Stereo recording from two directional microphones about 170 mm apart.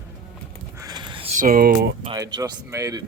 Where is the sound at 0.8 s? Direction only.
25° right (ahead or behind).